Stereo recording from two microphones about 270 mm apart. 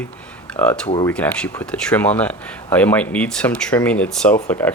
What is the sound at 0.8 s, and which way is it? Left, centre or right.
Speech, centre.